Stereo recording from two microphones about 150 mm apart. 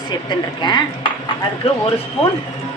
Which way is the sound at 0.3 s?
30° left (ahead or behind).